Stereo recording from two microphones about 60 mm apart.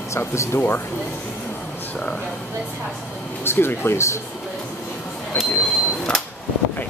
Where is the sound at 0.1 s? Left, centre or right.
Left.